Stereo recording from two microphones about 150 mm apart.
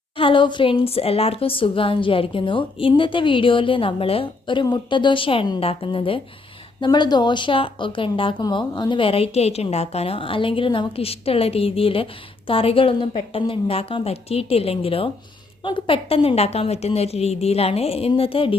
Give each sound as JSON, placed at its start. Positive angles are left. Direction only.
{"t": 0.2, "sound": "a woman's voice", "side_deg": 35}